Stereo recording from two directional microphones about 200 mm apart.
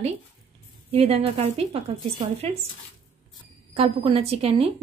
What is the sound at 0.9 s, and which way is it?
A woman's voice, 30° right (ahead or behind).